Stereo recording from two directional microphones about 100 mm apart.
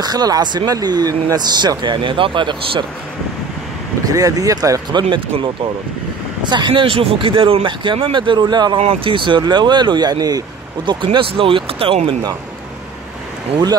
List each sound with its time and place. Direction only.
0.0 s speech: 40° right (ahead or behind); by 2.8 s 60° right (ahead or behind)
4.1 s speech: 35° right (ahead or behind)
6.4 s speech: 50° right (ahead or behind)
8.8 s speech: 60° right (ahead or behind); by 10.4 s 40° right (ahead or behind)
10.9 s speech: 55° right (ahead or behind)